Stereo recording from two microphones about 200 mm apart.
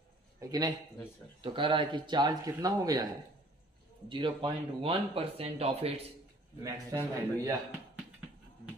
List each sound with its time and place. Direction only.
0.4 s speech: 20° right (ahead or behind)
4.1 s speech: 25° right (ahead or behind)
6.6 s speech: 15° right (ahead or behind)